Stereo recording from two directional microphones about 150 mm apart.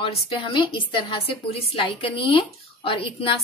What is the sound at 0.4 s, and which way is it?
A woman's voice, 35° left (ahead or behind).